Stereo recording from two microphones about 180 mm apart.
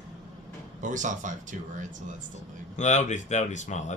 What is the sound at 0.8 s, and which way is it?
Speech, 45° right (ahead or behind).